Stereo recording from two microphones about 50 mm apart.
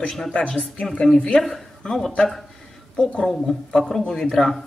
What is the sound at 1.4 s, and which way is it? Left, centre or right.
A woman's voice, centre.